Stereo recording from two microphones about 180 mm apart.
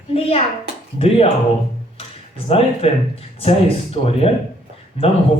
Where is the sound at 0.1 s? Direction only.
35° left (ahead or behind).